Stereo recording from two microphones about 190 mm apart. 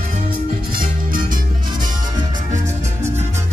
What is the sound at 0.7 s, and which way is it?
Music, 45° right (ahead or behind).